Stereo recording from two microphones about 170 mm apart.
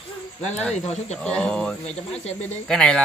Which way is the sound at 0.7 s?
40° left (ahead or behind).